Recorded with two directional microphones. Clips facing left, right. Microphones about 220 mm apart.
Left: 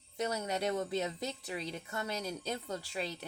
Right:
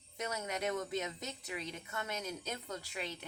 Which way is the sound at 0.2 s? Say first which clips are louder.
Left 4 dB; 35° left (ahead or behind).